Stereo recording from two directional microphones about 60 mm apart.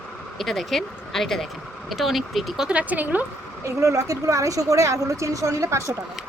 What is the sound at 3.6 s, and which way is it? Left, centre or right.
A woman's voice, right.